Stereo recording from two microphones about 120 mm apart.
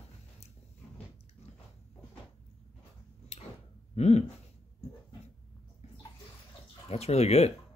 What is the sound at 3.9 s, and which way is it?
Speech, 65° left (ahead or behind).